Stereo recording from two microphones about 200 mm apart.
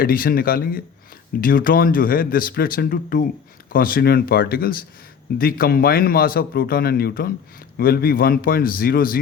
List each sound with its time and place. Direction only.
0.0 s speech: 45° left (ahead or behind)